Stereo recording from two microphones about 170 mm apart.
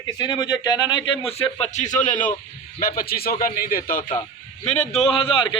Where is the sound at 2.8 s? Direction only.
60° left (ahead or behind).